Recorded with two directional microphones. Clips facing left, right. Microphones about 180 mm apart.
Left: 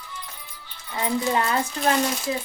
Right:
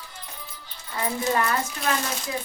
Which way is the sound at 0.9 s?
20° left (ahead or behind).